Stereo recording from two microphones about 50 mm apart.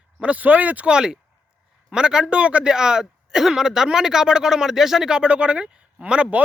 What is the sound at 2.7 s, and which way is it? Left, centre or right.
Speech, centre.